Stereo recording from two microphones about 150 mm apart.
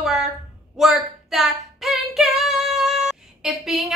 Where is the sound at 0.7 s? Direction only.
Centre (ahead or behind).